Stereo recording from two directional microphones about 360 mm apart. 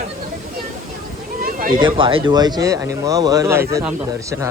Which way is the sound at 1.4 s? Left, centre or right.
Right.